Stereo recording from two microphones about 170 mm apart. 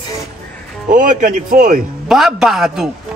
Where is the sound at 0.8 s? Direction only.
50° right (ahead or behind).